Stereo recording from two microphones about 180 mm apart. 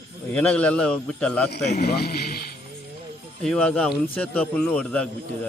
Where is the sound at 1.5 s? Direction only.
65° left (ahead or behind).